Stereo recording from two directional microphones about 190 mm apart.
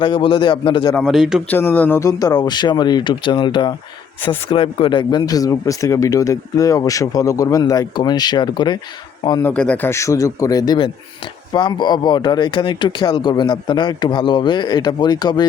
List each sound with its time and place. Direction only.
0.0 s speech: 25° left (ahead or behind)
0.9 s speech: centre (ahead or behind)
1.5 s speech: 10° left (ahead or behind)
9.4 s a man's voice: 5° left (ahead or behind)